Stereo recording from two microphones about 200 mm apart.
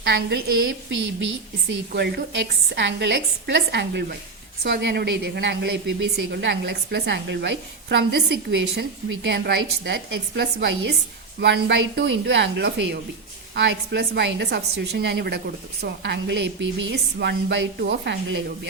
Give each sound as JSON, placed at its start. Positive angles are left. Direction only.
{"t": 0.0, "sound": "a woman's voice", "side_deg": -55}